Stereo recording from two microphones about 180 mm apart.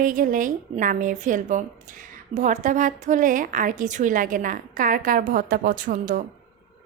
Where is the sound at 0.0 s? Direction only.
50° right (ahead or behind).